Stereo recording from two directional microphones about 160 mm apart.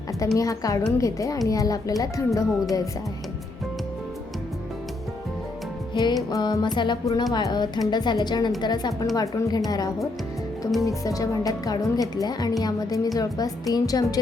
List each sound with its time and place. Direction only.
0.3 s speech: 20° left (ahead or behind)
2.5 s speech: centre (ahead or behind)
5.9 s music: 30° left (ahead or behind)
6.3 s speech: 25° left (ahead or behind)